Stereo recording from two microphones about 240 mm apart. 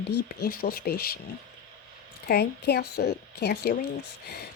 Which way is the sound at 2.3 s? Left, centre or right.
Left.